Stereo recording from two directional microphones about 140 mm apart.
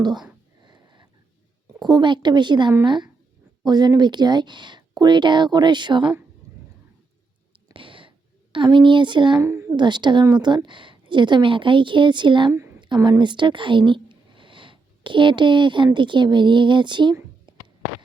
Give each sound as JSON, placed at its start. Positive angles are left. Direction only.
{"t": 0.6, "sound": "sniff", "side_deg": -35}
{"t": 1.8, "sound": "speech", "side_deg": -30}
{"t": 7.7, "sound": "a sound", "side_deg": -40}
{"t": 8.5, "sound": "speech", "side_deg": -35}
{"t": 9.4, "sound": "a sound", "side_deg": -20}
{"t": 9.7, "sound": "speech", "side_deg": -35}